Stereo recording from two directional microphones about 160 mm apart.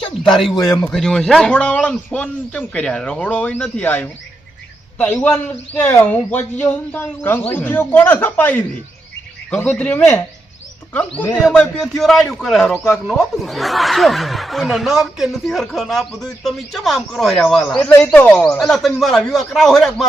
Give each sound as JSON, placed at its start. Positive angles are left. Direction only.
{"t": 0.3, "sound": "speech", "side_deg": 0}
{"t": 0.5, "sound": "a man's voice", "side_deg": 20}
{"t": 0.9, "sound": "a man's voice", "side_deg": 5}